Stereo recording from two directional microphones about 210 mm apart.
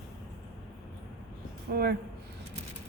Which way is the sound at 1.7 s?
50° right (ahead or behind).